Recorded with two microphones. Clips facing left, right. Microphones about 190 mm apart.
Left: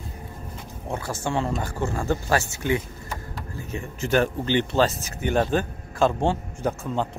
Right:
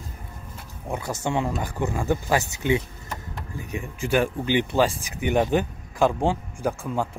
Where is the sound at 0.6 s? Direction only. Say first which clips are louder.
Even; 15° right (ahead or behind).